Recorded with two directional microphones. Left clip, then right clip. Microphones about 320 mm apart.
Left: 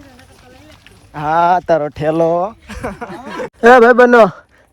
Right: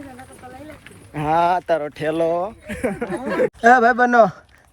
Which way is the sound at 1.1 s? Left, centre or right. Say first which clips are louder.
Left 5 dB; centre.